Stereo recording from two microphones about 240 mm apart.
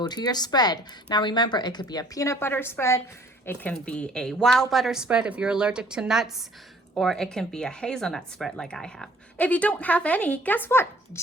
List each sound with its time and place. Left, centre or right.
0.0 s a woman's voice: centre